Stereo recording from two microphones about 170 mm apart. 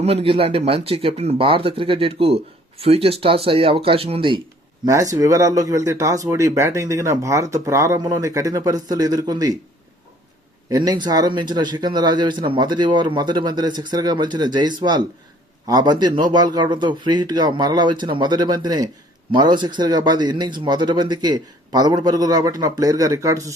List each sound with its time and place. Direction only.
0.0 s speech: 35° right (ahead or behind)
4.9 s speech: 15° right (ahead or behind)
10.7 s speech: 25° right (ahead or behind)